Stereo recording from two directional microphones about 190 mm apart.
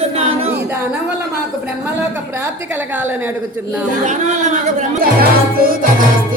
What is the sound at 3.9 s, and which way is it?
Speech, 40° right (ahead or behind).